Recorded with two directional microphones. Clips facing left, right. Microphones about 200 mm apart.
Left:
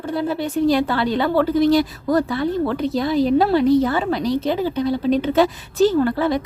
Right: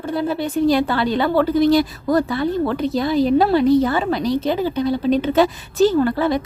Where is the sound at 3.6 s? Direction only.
25° right (ahead or behind).